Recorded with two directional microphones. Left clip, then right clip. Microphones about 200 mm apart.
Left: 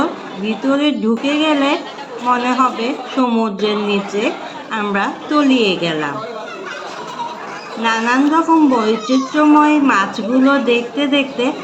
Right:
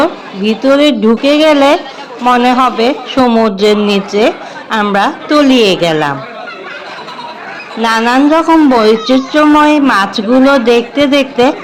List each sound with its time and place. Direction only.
0.0 s a woman's voice: 50° right (ahead or behind)
7.8 s speech: 50° right (ahead or behind)